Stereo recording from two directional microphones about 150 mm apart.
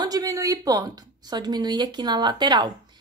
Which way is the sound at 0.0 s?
25° right (ahead or behind).